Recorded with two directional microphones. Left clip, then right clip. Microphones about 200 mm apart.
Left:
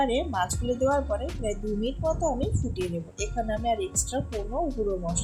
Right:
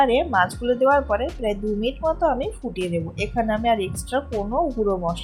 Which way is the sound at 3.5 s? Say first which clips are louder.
Right 6 dB; 15° right (ahead or behind).